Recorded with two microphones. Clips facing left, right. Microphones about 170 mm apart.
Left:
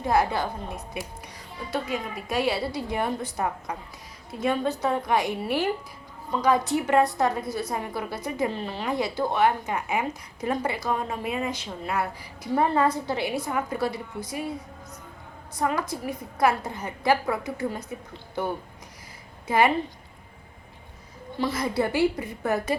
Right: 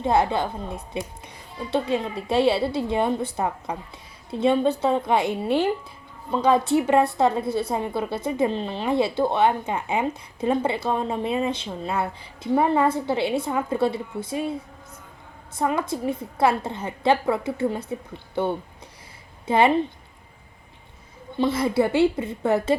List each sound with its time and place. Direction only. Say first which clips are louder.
0.0 s a woman's voice: right 2 dB; 25° right (ahead or behind)
15.5 s a woman's voice: right 3 dB; 25° right (ahead or behind)
21.3 s a woman's voice: right 5 dB; 25° right (ahead or behind)